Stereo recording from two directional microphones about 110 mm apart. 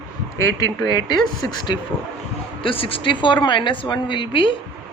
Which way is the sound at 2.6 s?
55° left (ahead or behind).